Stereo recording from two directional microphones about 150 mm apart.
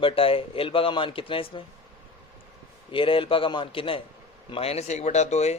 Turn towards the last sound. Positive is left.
turn(degrees=50)  # may be behind; listen again after turning